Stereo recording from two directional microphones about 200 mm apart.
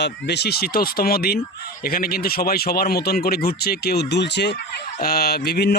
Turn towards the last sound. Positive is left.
turn(degrees=55)  # may be behind; listen again after turning